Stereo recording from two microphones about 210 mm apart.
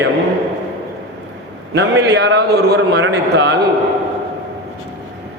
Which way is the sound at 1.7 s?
55° right (ahead or behind).